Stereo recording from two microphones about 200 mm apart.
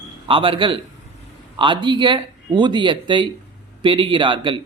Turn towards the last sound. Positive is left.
turn(degrees=-25)  # may be behind; listen again after turning